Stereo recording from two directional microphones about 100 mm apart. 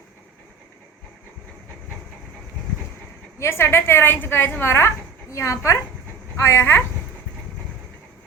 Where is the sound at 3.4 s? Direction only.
25° left (ahead or behind).